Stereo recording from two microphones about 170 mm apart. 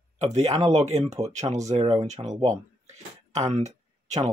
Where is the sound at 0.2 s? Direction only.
40° right (ahead or behind).